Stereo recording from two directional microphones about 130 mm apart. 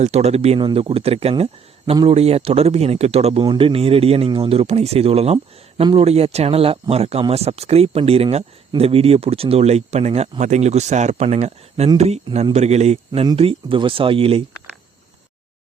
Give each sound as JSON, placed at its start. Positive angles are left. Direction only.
{"t": 0.0, "sound": "speech", "side_deg": -55}
{"t": 3.4, "sound": "speech", "side_deg": -40}
{"t": 13.3, "sound": "speech", "side_deg": -45}